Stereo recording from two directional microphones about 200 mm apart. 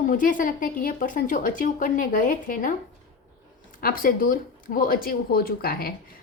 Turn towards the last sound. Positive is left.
turn(degrees=50)  # may be behind; listen again after turning